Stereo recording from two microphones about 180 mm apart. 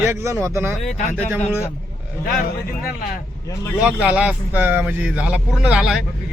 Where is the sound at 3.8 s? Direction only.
5° right (ahead or behind).